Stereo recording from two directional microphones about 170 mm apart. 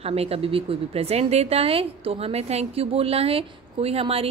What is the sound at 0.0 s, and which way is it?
A woman's voice, 35° right (ahead or behind).